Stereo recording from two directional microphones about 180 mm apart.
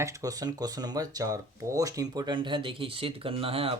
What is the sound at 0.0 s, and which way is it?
Speech, 20° right (ahead or behind).